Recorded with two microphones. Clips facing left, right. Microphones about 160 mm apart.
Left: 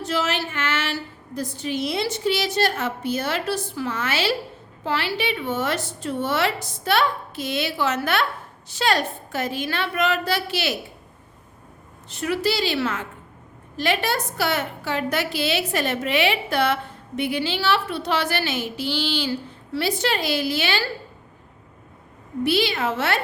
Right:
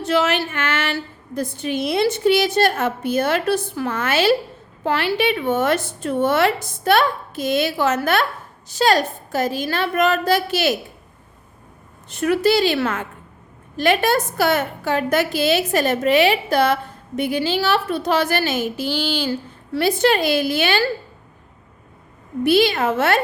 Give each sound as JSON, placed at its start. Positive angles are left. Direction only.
{"t": 0.0, "sound": "a woman's voice", "side_deg": -60}
{"t": 12.0, "sound": "a woman's voice", "side_deg": -55}
{"t": 22.4, "sound": "a woman's voice", "side_deg": -50}